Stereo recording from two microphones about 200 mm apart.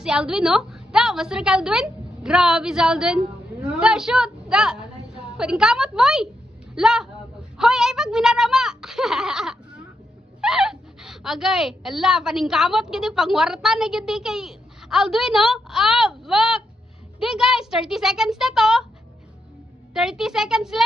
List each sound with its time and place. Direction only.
0.0 s a woman's voice: 5° right (ahead or behind)
19.9 s a woman's voice: 5° right (ahead or behind)